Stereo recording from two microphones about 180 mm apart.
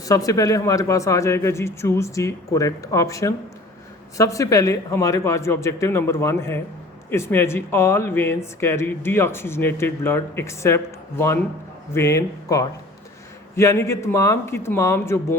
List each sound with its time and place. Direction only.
0.0 s speech: 20° left (ahead or behind)
11.9 s speech: 15° left (ahead or behind)